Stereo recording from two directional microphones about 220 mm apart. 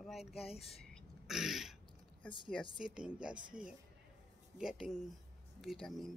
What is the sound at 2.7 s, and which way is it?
Speech, 5° right (ahead or behind).